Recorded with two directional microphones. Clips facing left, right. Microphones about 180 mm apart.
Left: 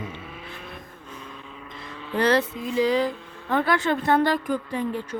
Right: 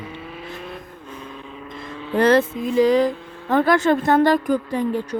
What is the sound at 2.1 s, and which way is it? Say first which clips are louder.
Speech: right 5 dB; 50° right (ahead or behind).